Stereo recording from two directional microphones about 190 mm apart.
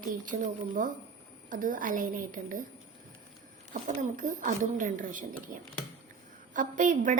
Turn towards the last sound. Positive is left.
turn(degrees=-45)  # may be behind; listen again after turning